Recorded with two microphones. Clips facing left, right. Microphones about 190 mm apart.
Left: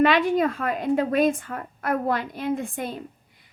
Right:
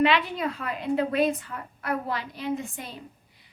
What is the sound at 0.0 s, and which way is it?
A woman's voice, 45° left (ahead or behind).